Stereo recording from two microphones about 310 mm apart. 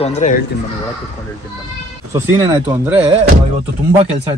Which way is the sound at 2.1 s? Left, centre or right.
Centre.